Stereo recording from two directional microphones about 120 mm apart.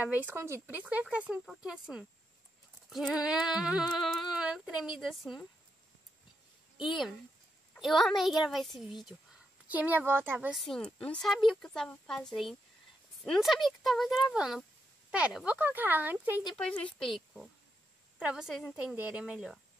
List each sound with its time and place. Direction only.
0.1 s speech: 15° right (ahead or behind); by 5.4 s centre (ahead or behind)
7.8 s speech: centre (ahead or behind)
9.7 s speech: 15° right (ahead or behind)
10.5 s speech: centre (ahead or behind); by 16.4 s 15° right (ahead or behind)
16.4 s speech: 5° left (ahead or behind)